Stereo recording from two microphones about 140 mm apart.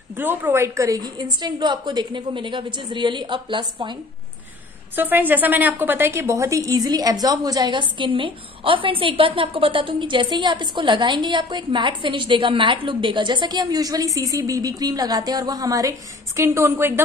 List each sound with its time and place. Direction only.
0.1 s a woman's voice: 15° right (ahead or behind); by 4.0 s 35° right (ahead or behind)
4.9 s a woman's voice: 15° right (ahead or behind)